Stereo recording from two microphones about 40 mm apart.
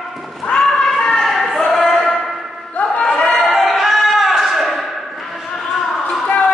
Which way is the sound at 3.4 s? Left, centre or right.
Centre.